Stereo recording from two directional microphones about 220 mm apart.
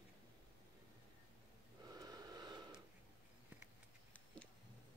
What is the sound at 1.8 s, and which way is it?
Gasp, 15° right (ahead or behind).